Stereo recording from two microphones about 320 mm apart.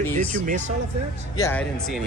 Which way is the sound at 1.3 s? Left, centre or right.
Centre.